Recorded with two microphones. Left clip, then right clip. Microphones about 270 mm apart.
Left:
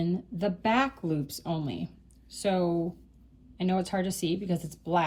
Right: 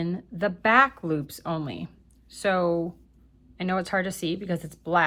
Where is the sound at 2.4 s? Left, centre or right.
Centre.